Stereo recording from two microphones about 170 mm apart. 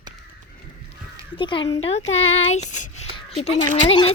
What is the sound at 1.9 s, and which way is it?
Speech, 40° left (ahead or behind).